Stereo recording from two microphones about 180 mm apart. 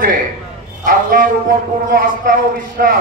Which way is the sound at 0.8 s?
50° right (ahead or behind).